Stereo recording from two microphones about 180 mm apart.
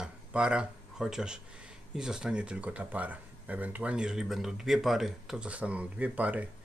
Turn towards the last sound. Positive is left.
turn(degrees=-10)  # may be behind; listen again after turning